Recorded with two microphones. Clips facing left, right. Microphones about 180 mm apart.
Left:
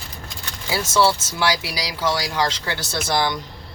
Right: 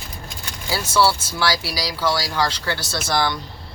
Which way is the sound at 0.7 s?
20° left (ahead or behind).